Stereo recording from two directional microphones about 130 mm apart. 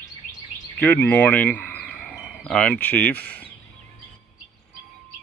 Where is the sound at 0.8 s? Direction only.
15° left (ahead or behind).